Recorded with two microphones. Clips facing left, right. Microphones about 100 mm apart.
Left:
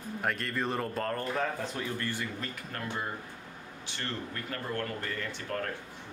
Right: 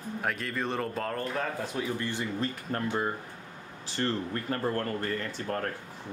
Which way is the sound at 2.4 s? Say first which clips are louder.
Right 7 dB; 35° right (ahead or behind).